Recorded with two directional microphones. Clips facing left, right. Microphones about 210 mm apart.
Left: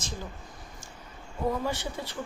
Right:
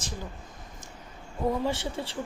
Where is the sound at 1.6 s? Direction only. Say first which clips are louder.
Right 2 dB; 25° right (ahead or behind).